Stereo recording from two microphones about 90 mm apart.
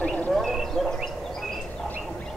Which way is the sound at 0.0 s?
10° left (ahead or behind).